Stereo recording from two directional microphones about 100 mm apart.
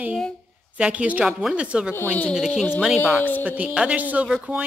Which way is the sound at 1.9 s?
20° left (ahead or behind).